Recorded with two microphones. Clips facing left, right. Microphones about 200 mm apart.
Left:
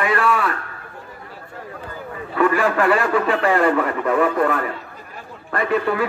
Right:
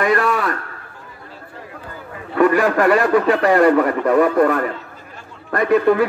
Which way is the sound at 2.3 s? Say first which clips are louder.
Right 3 dB; 40° right (ahead or behind).